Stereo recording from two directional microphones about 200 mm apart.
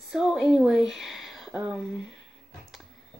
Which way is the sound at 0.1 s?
5° right (ahead or behind).